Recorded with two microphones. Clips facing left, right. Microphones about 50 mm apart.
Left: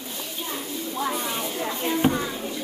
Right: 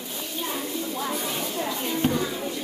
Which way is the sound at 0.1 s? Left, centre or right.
Centre.